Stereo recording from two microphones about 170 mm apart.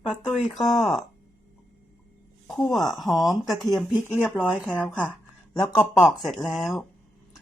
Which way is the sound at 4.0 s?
10° right (ahead or behind).